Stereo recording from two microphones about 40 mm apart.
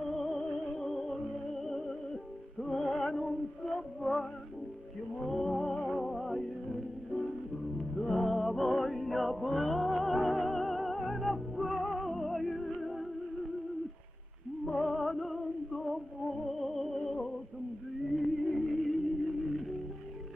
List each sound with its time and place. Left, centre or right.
0.1 s music: centre
14.7 s music: centre